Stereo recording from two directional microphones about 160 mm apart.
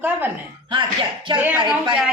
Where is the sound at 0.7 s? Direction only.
30° right (ahead or behind).